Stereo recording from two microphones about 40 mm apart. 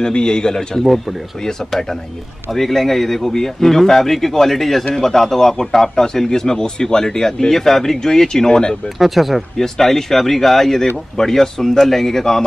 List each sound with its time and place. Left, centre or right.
0.0 s speech: left
0.8 s a man's voice: centre
8.9 s speech: centre
9.6 s a man's voice: centre